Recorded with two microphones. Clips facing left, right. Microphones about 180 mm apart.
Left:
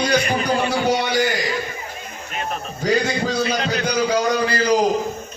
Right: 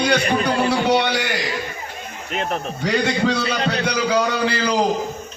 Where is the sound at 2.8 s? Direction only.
65° right (ahead or behind).